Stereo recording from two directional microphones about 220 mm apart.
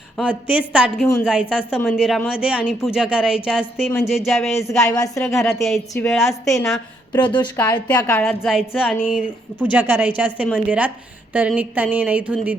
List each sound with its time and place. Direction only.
0.2 s a woman's voice: 5° right (ahead or behind)
4.8 s a woman's voice: 15° left (ahead or behind)
5.2 s speech: centre (ahead or behind)
7.1 s a woman's voice: 20° left (ahead or behind); by 12.5 s 5° right (ahead or behind)